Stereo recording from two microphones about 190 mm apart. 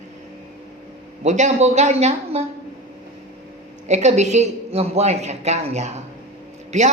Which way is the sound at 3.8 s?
35° right (ahead or behind).